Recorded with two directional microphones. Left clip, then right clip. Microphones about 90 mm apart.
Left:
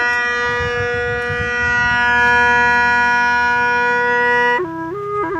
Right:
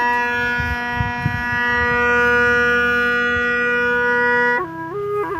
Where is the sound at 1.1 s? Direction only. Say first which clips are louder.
Left 3 dB; 20° right (ahead or behind).